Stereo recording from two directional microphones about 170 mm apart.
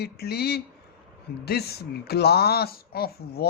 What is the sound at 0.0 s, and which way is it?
Speech, 70° left (ahead or behind).